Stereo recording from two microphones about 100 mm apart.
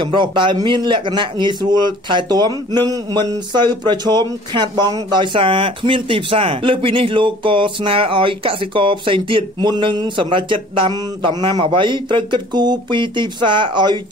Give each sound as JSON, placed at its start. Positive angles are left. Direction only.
{"t": 0.0, "sound": "a man's voice", "side_deg": -50}